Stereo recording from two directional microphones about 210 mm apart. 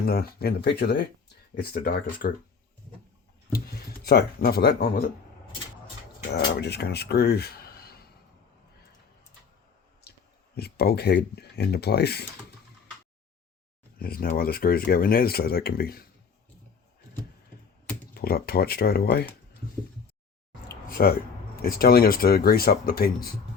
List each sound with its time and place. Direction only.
0.0 s speech: 50° left (ahead or behind)
3.5 s speech: 50° left (ahead or behind)
6.3 s speech: 50° left (ahead or behind)
10.5 s speech: 50° left (ahead or behind)
14.0 s speech: 45° left (ahead or behind)
18.1 s speech: 45° left (ahead or behind)
20.9 s speech: 45° left (ahead or behind)